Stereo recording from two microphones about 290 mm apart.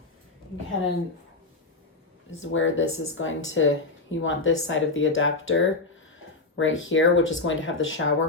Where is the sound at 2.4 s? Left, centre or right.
Left.